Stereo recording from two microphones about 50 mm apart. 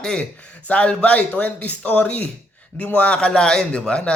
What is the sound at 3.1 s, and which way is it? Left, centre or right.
Speech, centre.